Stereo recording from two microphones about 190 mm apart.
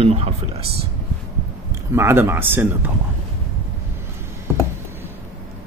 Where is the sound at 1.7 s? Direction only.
15° right (ahead or behind).